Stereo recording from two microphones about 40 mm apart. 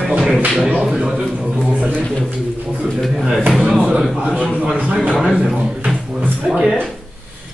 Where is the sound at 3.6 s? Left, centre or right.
Right.